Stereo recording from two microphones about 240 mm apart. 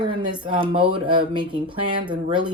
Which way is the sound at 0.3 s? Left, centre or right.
Centre.